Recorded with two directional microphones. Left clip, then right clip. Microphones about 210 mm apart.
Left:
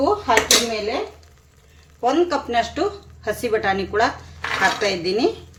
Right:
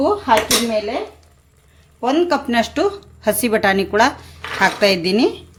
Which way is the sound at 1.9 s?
50° right (ahead or behind).